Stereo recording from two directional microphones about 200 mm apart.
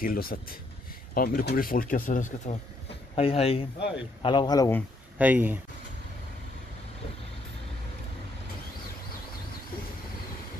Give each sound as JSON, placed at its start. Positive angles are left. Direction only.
{"t": 0.0, "sound": "speech", "side_deg": 45}
{"t": 3.2, "sound": "speech", "side_deg": 30}
{"t": 5.2, "sound": "speech", "side_deg": -10}